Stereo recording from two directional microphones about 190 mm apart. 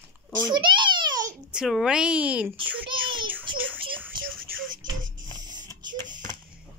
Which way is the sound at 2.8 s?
25° right (ahead or behind).